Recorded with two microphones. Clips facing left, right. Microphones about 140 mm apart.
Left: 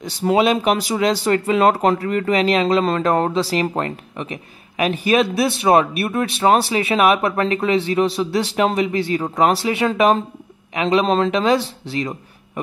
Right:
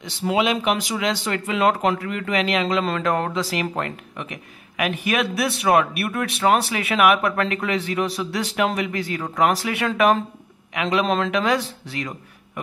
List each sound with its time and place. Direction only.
0.0 s speech: 40° left (ahead or behind)